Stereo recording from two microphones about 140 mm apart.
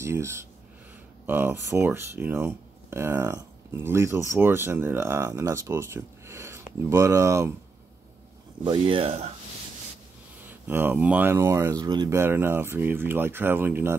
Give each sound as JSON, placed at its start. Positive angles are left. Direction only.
{"t": 0.0, "sound": "speech", "side_deg": -20}
{"t": 8.6, "sound": "speech", "side_deg": -35}
{"t": 10.4, "sound": "speech", "side_deg": -15}
{"t": 12.2, "sound": "speech", "side_deg": -15}